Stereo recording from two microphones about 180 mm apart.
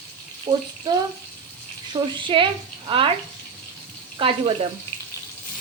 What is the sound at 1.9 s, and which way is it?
Speech, 25° right (ahead or behind).